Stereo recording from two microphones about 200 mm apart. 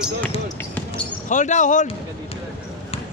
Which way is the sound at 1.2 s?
40° left (ahead or behind).